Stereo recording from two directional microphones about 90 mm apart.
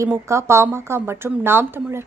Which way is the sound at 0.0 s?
30° right (ahead or behind).